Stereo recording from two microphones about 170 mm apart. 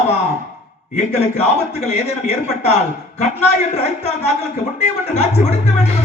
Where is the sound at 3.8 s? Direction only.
40° left (ahead or behind).